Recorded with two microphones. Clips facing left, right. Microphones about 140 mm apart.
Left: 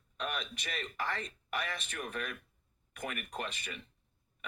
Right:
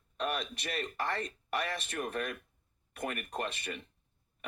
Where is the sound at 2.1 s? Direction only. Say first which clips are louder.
Right 4 dB; 40° right (ahead or behind).